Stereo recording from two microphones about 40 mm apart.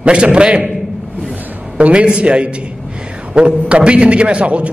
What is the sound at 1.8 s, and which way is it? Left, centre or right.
A man's voice, right.